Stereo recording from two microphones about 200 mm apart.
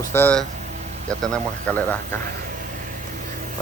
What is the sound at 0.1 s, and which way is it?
Speech, 10° left (ahead or behind).